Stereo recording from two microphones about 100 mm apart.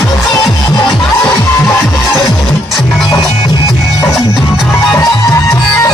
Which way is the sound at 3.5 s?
40° left (ahead or behind).